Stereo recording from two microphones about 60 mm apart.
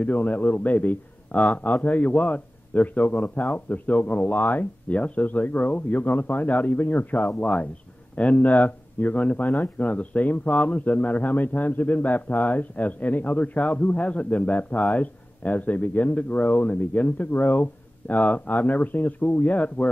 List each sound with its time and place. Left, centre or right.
0.0 s speech: left